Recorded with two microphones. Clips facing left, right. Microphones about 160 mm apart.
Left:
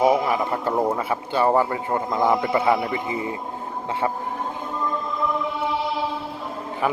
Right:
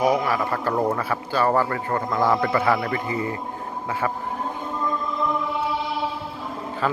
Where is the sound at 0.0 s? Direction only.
25° left (ahead or behind).